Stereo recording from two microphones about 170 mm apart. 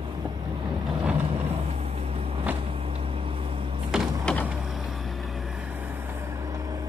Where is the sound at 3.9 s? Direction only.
5° left (ahead or behind).